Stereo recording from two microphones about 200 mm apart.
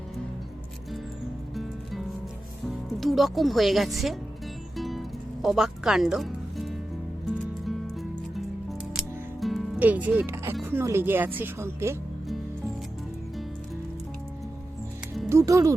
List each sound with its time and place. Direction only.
1.5 s music: centre (ahead or behind)
2.6 s speech: centre (ahead or behind)
4.8 s music: centre (ahead or behind)
9.0 s speech: centre (ahead or behind)
15.3 s speech: 15° right (ahead or behind)